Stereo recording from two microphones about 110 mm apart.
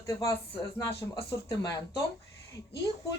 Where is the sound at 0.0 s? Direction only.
30° left (ahead or behind).